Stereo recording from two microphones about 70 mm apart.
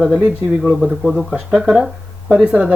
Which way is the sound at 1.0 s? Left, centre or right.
Centre.